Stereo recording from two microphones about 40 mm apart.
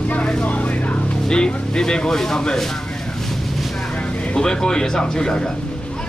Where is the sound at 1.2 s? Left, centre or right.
Left.